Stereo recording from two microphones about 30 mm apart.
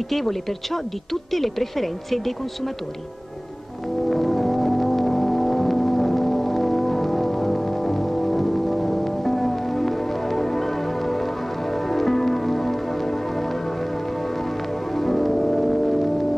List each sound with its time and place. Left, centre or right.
0.1 s speech: centre
4.1 s vehicle: centre
15.0 s music: centre